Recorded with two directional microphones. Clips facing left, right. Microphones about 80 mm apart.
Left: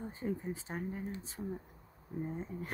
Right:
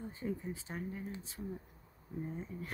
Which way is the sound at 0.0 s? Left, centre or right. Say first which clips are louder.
Left 2 dB; left.